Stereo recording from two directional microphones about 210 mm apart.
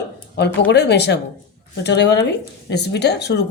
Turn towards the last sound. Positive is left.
turn(degrees=55)  # may be behind; listen again after turning